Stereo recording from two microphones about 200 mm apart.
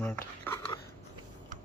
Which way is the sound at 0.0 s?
10° left (ahead or behind).